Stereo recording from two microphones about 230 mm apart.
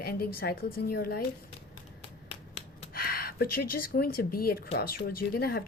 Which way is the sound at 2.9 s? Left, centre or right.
Left.